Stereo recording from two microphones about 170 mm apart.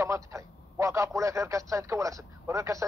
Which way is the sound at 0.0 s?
15° right (ahead or behind).